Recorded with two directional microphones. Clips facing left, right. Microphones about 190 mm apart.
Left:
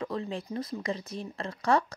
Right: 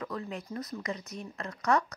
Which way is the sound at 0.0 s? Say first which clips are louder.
Left 4 dB; 25° left (ahead or behind).